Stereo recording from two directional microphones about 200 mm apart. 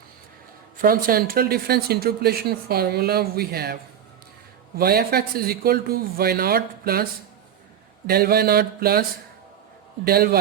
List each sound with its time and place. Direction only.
0.8 s speech: 45° right (ahead or behind)
4.8 s speech: 50° right (ahead or behind)